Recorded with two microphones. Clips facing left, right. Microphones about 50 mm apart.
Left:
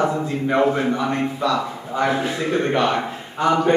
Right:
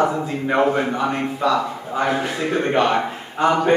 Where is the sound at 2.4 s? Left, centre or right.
Right.